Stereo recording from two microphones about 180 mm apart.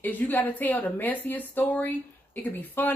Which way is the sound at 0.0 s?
10° left (ahead or behind).